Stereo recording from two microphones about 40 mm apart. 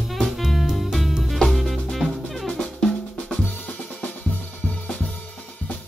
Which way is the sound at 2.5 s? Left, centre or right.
Left.